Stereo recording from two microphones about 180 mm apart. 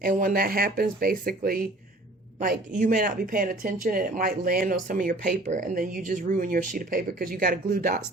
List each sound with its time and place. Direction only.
0.0 s speech: 50° right (ahead or behind)